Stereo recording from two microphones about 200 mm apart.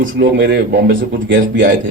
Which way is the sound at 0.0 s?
60° right (ahead or behind).